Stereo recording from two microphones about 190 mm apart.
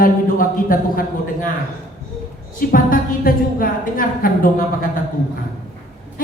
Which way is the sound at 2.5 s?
50° left (ahead or behind).